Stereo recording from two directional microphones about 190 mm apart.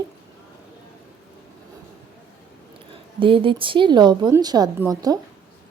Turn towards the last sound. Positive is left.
turn(degrees=-20)  # may be behind; listen again after turning